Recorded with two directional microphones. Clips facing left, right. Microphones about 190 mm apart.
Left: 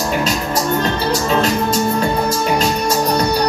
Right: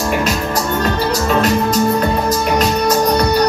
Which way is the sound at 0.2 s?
25° left (ahead or behind).